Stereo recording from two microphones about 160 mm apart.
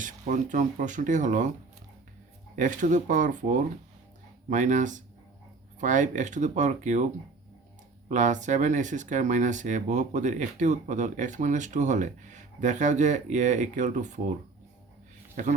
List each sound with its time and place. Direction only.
0.0 s speech: 55° right (ahead or behind)
2.6 s speech: 55° right (ahead or behind)
8.1 s speech: 50° right (ahead or behind)